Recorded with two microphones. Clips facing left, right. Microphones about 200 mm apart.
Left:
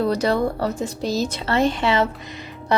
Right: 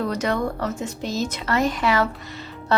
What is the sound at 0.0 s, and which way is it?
Speech, 35° left (ahead or behind).